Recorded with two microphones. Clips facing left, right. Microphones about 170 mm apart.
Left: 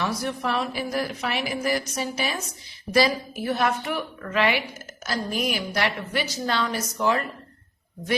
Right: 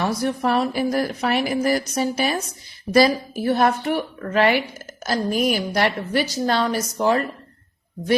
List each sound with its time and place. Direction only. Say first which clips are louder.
0.0 s a woman's voice: right 5 dB; 40° right (ahead or behind)